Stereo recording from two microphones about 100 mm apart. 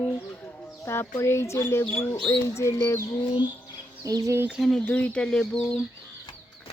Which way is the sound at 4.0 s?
40° right (ahead or behind).